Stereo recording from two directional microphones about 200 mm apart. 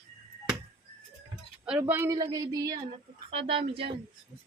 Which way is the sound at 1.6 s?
5° right (ahead or behind).